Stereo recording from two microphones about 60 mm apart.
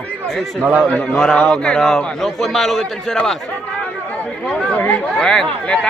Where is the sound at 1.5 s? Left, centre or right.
Centre.